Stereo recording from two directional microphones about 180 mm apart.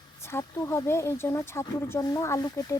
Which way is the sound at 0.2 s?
15° left (ahead or behind).